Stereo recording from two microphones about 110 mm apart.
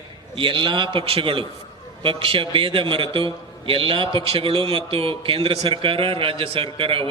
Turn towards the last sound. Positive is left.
turn(degrees=-55)  # may be behind; listen again after turning